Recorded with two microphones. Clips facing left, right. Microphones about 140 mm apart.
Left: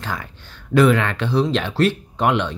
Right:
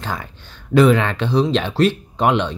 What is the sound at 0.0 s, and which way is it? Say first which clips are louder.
Speech: right 2 dB; 25° right (ahead or behind).